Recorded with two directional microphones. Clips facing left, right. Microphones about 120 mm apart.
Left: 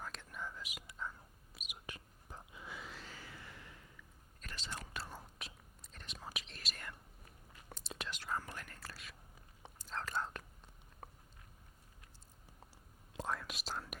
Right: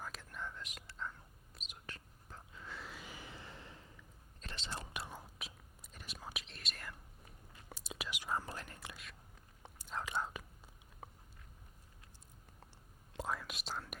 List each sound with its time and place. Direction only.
0.0 s whispering: centre (ahead or behind); by 2.7 s 15° left (ahead or behind)
2.7 s a sound: centre (ahead or behind)
3.1 s a sound: 20° right (ahead or behind)
4.4 s whispering: 25° right (ahead or behind)
5.0 s whispering: centre (ahead or behind); by 8.4 s 15° right (ahead or behind)
8.4 s speech: 25° right (ahead or behind)
9.7 s whispering: 10° right (ahead or behind)
11.0 s biting: centre (ahead or behind)
13.1 s whispering: centre (ahead or behind)